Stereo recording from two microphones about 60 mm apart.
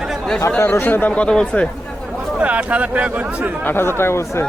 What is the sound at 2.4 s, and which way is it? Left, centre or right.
Speech, right.